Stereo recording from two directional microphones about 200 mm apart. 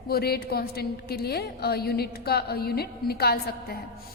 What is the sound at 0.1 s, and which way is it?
A woman's voice, 50° left (ahead or behind).